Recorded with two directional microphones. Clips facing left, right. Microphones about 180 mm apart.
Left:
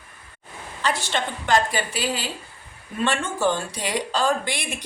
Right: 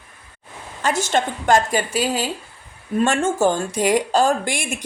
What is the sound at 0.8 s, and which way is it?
A woman's voice, 45° right (ahead or behind).